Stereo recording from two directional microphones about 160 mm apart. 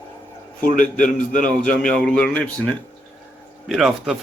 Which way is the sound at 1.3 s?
55° left (ahead or behind).